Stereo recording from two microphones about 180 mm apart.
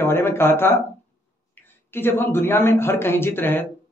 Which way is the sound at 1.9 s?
10° left (ahead or behind).